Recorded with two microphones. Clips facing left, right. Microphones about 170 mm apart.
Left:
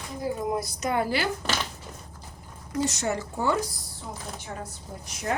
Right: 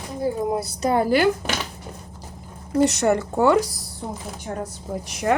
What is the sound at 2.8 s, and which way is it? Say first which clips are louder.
Speech: right 9 dB; 65° right (ahead or behind).